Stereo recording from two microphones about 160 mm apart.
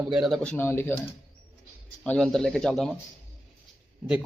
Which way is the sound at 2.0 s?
5° left (ahead or behind).